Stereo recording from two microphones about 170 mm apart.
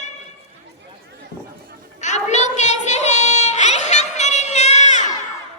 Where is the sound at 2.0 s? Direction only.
45° left (ahead or behind).